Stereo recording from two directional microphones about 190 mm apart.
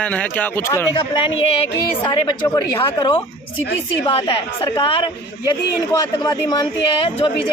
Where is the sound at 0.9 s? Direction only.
25° left (ahead or behind).